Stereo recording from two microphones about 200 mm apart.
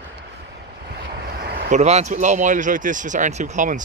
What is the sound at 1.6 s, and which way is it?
Speech, 35° right (ahead or behind).